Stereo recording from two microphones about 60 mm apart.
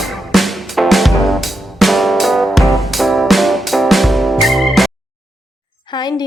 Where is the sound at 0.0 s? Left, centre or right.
Centre.